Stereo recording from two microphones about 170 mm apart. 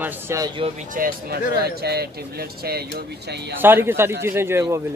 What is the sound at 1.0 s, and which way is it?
Speech, 60° right (ahead or behind).